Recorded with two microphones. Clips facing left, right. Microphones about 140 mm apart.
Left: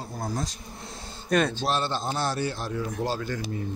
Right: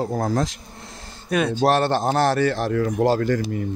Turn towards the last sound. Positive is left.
turn(degrees=-90)